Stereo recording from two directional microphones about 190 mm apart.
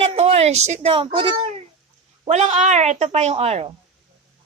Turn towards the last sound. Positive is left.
turn(degrees=-35)  # may be behind; listen again after turning